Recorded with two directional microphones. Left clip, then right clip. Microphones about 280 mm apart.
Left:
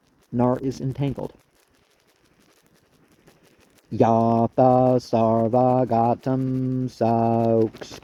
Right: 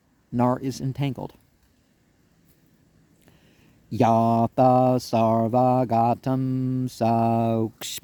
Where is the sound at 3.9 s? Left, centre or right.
Right.